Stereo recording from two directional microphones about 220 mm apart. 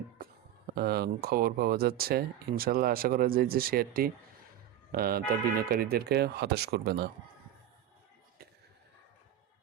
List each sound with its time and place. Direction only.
0.7 s speech: 45° right (ahead or behind)